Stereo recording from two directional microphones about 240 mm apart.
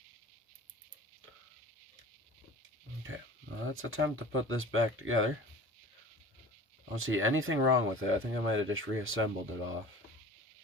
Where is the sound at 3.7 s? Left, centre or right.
Right.